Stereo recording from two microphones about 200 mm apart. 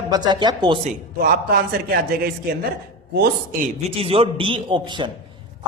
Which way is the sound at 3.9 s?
30° right (ahead or behind).